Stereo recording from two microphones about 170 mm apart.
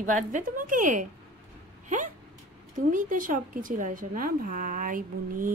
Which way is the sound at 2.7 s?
50° right (ahead or behind).